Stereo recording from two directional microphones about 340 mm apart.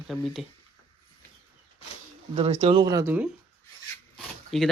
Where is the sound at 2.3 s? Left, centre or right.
Centre.